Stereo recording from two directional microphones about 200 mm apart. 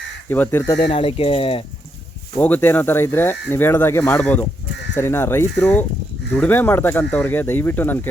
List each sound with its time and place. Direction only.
0.3 s speech: 10° left (ahead or behind)
0.8 s speech: 25° left (ahead or behind)
2.3 s speech: 10° left (ahead or behind)